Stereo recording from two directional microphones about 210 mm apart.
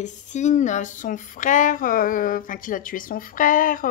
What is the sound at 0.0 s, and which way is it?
Speech, 35° left (ahead or behind).